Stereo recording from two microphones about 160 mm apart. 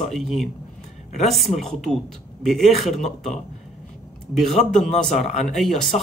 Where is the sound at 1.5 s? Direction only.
40° left (ahead or behind).